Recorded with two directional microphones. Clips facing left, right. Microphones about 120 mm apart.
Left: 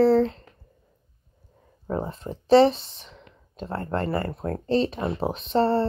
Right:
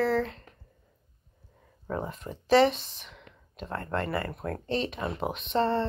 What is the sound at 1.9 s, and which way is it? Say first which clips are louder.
Speech: left 4 dB; 30° left (ahead or behind).